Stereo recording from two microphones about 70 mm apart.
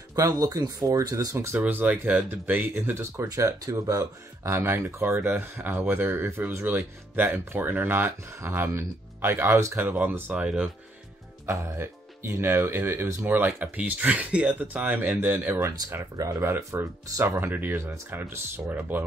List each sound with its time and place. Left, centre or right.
0.1 s speech: right
1.3 s speech: right
1.6 s speech: right
2.9 s speech: right
3.3 s speech: right
9.9 s speech: right
10.3 s speech: centre
11.4 s speech: right
16.2 s speech: right
16.4 s speech: right
18.7 s speech: right